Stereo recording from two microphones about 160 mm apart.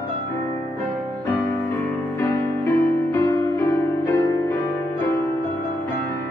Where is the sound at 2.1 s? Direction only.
15° left (ahead or behind).